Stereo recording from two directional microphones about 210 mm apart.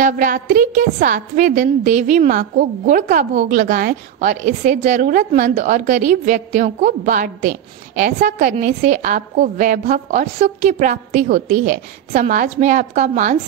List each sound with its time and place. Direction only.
0.0 s a woman's voice: 40° right (ahead or behind)